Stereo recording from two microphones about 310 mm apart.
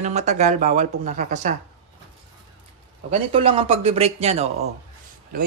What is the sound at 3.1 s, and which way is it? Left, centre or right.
Speech, centre.